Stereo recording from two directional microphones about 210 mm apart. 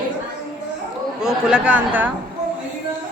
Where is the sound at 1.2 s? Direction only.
5° right (ahead or behind).